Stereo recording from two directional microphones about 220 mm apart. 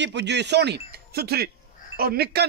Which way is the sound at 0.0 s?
50° right (ahead or behind).